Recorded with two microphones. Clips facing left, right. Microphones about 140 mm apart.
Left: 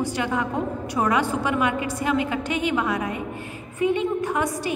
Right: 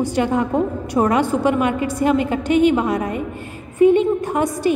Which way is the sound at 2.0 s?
50° right (ahead or behind).